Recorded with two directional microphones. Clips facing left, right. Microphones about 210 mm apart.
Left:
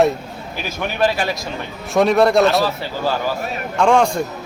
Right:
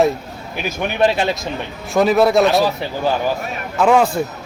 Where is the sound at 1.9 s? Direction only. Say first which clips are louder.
Even; centre (ahead or behind).